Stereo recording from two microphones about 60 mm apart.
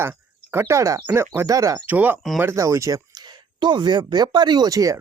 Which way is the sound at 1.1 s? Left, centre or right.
Right.